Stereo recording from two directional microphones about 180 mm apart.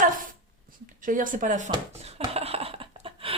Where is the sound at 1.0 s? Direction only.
50° right (ahead or behind).